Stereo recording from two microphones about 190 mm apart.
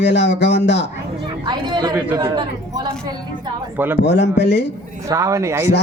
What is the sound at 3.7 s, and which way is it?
Speech, 10° right (ahead or behind).